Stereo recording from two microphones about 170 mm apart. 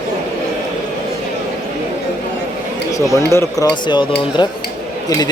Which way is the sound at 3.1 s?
15° left (ahead or behind).